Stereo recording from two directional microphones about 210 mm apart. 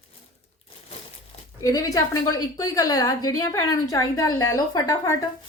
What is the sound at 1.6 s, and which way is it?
A woman's voice, 15° left (ahead or behind).